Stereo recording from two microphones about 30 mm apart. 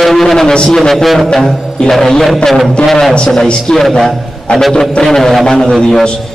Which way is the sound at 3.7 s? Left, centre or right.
Left.